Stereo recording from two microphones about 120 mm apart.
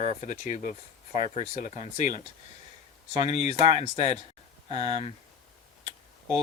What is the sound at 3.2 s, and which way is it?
Speech, 65° left (ahead or behind).